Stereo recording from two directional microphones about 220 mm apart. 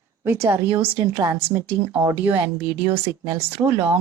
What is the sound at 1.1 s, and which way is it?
Speech, 15° right (ahead or behind).